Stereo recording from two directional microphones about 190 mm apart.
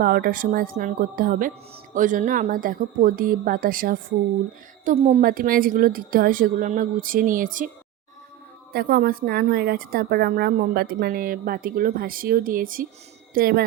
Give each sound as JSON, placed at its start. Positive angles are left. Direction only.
{"t": 0.0, "sound": "a woman's voice", "side_deg": -50}
{"t": 4.9, "sound": "a woman's voice", "side_deg": -35}
{"t": 5.2, "sound": "a woman's voice", "side_deg": -45}
{"t": 8.7, "sound": "a woman's voice", "side_deg": -50}